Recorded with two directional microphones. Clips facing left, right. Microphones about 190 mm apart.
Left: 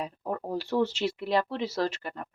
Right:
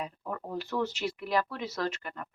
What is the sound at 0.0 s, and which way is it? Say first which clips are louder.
A woman's voice: left 4 dB; 35° left (ahead or behind).